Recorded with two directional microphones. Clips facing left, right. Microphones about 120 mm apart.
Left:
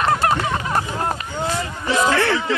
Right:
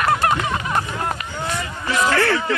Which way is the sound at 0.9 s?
30° left (ahead or behind).